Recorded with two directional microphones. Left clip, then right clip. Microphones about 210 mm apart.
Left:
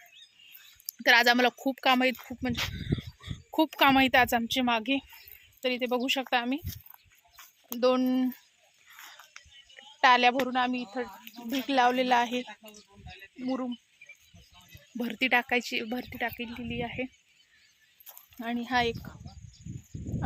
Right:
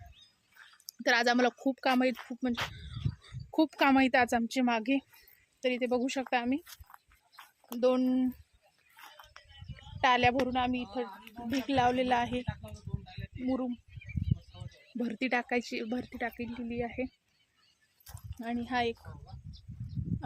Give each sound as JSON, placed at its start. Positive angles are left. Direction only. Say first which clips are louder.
{"t": 1.0, "sound": "speech", "louder": "left 5 dB", "side_deg": 5}
{"t": 7.8, "sound": "speech", "louder": "left 2 dB", "side_deg": 15}
{"t": 9.4, "sound": "a sound", "louder": "left 4 dB", "side_deg": 5}
{"t": 9.7, "sound": "a woman's voice", "louder": "left 5 dB", "side_deg": 15}
{"t": 14.9, "sound": "speech", "louder": "left 6 dB", "side_deg": 5}
{"t": 18.3, "sound": "speech", "louder": "left 4 dB", "side_deg": 25}